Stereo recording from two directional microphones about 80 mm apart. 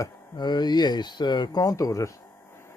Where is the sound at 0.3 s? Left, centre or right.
Left.